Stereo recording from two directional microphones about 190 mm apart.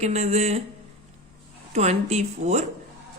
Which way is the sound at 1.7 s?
35° right (ahead or behind).